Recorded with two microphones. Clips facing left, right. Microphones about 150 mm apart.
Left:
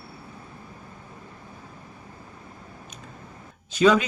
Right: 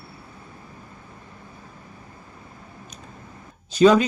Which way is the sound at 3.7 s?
35° right (ahead or behind).